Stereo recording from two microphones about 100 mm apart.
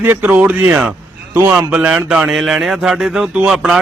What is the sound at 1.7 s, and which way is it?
A man's voice, 15° right (ahead or behind).